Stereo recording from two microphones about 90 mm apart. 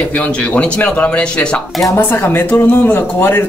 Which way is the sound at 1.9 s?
20° left (ahead or behind).